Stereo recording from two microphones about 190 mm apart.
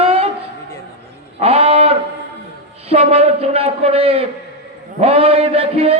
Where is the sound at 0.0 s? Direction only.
30° right (ahead or behind).